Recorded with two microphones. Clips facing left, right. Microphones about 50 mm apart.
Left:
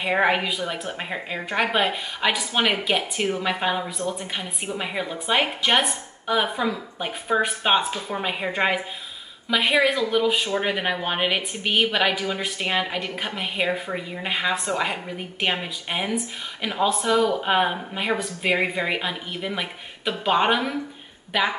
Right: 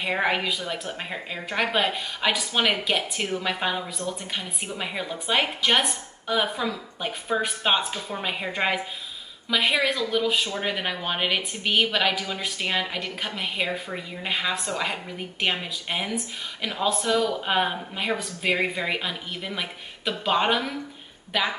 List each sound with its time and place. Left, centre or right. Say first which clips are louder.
0.0 s speech: left 3 dB; centre